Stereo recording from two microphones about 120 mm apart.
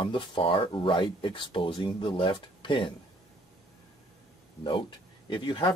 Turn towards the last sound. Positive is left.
turn(degrees=40)  # may be behind; listen again after turning